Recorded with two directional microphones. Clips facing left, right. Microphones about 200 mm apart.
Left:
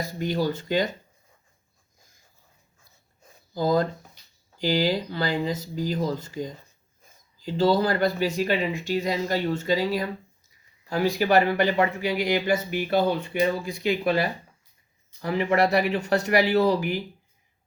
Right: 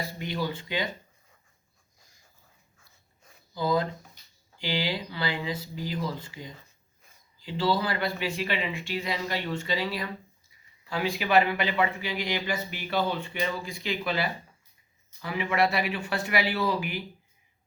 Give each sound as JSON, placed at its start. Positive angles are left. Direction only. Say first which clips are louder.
{"t": 0.0, "sound": "speech", "louder": "left 6 dB", "side_deg": 45}
{"t": 3.5, "sound": "speech", "louder": "left 4 dB", "side_deg": 45}